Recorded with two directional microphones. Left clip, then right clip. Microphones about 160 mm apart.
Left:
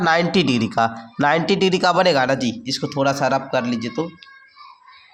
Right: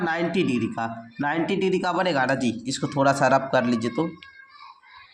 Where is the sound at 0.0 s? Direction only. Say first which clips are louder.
Left 7 dB; 50° left (ahead or behind); by 4.1 s centre (ahead or behind).